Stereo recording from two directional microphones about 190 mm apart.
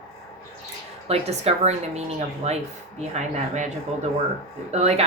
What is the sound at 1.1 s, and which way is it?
Speech, 35° right (ahead or behind).